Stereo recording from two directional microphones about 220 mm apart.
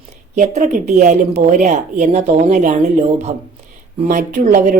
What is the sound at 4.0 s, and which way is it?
Speech, 35° right (ahead or behind).